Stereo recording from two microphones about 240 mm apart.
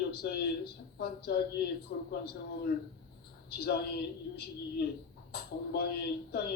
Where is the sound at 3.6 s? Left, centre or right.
Left.